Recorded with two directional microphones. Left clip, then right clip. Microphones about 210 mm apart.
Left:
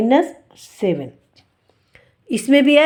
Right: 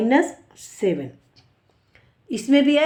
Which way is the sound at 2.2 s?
45° left (ahead or behind).